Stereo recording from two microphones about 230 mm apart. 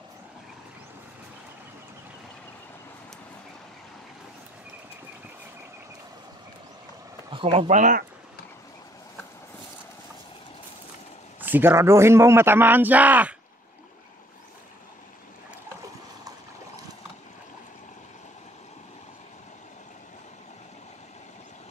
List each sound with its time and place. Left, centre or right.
7.2 s speech: right
11.4 s a man's voice: centre